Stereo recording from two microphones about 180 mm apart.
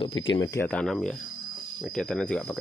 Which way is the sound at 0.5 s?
5° left (ahead or behind).